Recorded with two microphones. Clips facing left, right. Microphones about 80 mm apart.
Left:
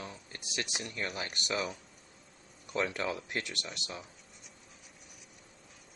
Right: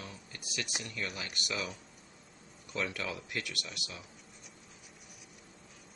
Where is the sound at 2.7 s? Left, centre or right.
Left.